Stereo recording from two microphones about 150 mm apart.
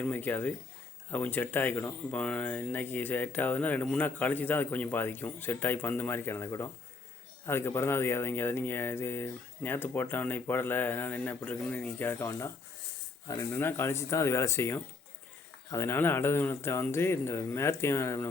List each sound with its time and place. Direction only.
0.0 s speech: 10° left (ahead or behind)